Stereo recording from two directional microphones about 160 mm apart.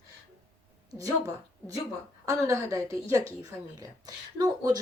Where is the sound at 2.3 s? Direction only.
20° right (ahead or behind).